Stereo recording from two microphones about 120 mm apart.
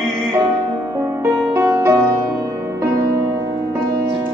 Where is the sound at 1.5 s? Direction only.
25° right (ahead or behind).